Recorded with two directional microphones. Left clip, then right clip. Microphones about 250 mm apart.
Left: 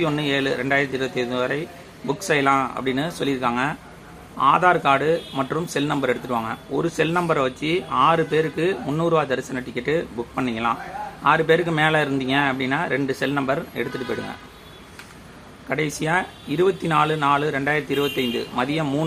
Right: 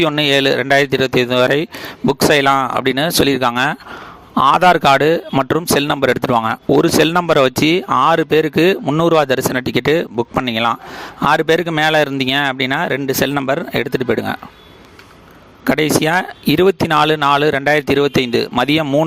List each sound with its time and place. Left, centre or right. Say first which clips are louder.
0.0 s a man's voice: right 9 dB; right
15.7 s a man's voice: right 8 dB; right